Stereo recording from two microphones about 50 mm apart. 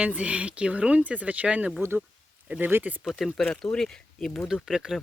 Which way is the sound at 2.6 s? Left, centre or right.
Right.